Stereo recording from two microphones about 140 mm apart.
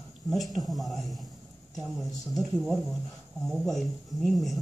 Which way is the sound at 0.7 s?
Centre (ahead or behind).